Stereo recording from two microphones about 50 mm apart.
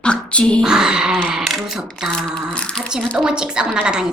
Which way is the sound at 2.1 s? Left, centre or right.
Centre.